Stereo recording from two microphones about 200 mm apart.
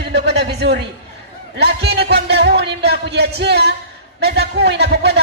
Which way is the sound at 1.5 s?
55° right (ahead or behind).